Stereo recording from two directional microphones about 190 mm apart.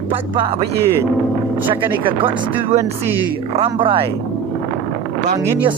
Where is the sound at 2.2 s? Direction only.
30° right (ahead or behind).